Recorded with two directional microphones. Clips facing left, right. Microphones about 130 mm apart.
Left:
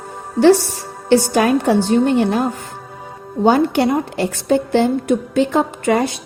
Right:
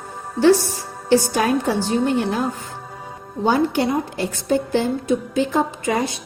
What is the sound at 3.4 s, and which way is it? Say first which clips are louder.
A woman's voice: left 4 dB; 70° left (ahead or behind).